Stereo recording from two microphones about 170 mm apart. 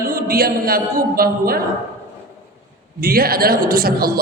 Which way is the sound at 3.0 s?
60° right (ahead or behind).